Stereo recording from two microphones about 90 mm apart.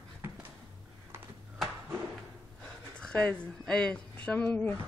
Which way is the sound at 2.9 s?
15° left (ahead or behind).